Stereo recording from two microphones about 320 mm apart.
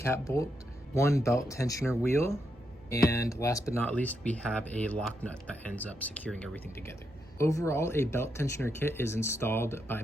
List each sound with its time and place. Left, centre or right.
0.0 s speech: centre